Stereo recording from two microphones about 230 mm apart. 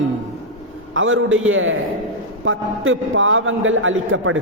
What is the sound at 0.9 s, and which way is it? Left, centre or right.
A man's voice, right.